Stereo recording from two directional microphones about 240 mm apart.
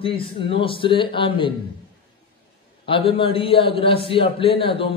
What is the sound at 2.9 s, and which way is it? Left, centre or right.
A man's voice, left.